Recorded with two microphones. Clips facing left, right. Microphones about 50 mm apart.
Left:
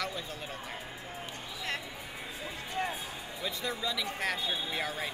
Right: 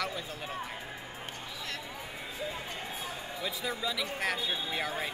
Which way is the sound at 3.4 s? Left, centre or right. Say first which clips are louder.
Even; centre.